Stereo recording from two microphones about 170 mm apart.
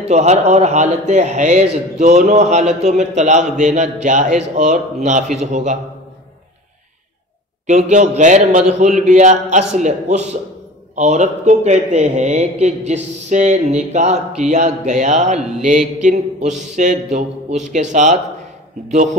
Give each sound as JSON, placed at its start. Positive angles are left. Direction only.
{"t": 0.0, "sound": "a man's voice", "side_deg": -40}
{"t": 7.6, "sound": "a man's voice", "side_deg": -45}